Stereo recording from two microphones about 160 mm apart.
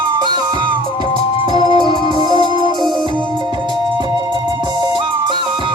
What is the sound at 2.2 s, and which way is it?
Music, 30° right (ahead or behind).